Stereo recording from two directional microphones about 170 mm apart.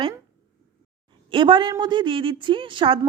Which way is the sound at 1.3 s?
30° right (ahead or behind).